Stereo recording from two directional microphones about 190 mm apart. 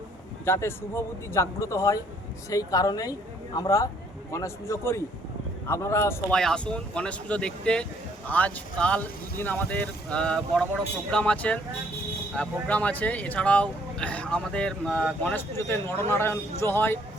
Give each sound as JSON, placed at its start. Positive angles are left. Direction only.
{"t": 0.4, "sound": "speech", "side_deg": 10}
{"t": 6.3, "sound": "speech", "side_deg": 5}